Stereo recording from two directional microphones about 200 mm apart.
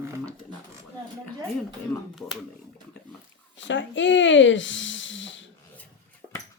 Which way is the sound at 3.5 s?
65° left (ahead or behind).